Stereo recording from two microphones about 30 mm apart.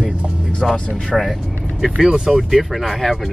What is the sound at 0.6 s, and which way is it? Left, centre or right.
Speech, centre.